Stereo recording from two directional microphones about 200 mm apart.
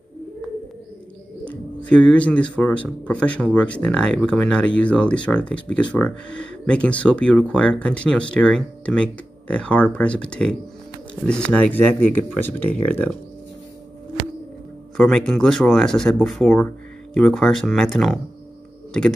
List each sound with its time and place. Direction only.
1.4 s speech: 5° left (ahead or behind)
15.0 s speech: 5° left (ahead or behind)